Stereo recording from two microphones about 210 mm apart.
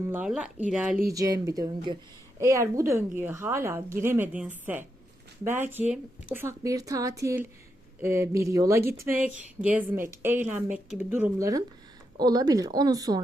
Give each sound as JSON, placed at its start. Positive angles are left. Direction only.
{"t": 0.1, "sound": "speech", "side_deg": -5}
{"t": 1.1, "sound": "speech", "side_deg": -15}